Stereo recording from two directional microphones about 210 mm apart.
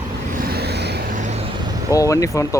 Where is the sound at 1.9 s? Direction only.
15° left (ahead or behind).